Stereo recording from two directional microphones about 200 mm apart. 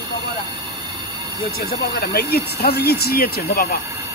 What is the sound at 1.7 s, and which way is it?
Speech, 50° left (ahead or behind).